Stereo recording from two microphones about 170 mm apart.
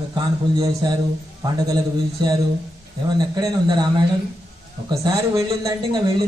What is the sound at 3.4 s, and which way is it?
A man's voice, 25° right (ahead or behind).